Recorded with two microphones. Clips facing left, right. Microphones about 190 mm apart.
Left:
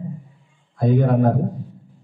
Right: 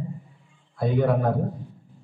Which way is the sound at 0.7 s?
45° left (ahead or behind).